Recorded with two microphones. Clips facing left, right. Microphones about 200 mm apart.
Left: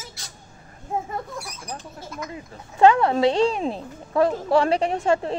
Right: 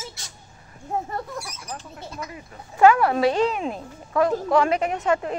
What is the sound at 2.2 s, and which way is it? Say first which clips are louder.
Speech: left 3 dB; 25° left (ahead or behind).